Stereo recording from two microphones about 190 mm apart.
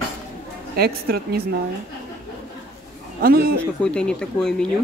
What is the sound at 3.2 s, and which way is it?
Speech, 50° right (ahead or behind).